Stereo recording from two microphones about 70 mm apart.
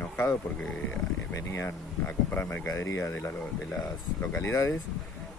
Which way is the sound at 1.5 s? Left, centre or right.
Left.